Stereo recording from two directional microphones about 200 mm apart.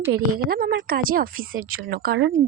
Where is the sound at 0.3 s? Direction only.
50° right (ahead or behind).